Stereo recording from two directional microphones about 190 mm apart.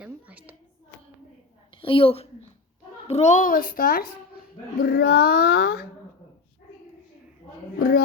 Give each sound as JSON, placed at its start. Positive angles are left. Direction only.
{"t": 0.0, "sound": "hands", "side_deg": -5}
{"t": 1.8, "sound": "a woman's voice", "side_deg": 25}
{"t": 7.8, "sound": "a woman's voice", "side_deg": 50}